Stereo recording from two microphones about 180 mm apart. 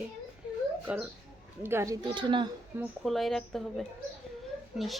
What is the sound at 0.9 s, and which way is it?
Speech, 5° right (ahead or behind).